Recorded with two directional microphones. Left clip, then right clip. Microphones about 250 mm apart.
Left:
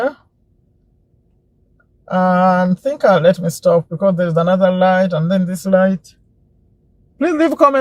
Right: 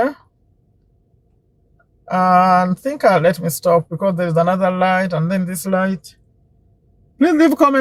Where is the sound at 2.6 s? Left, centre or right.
Right.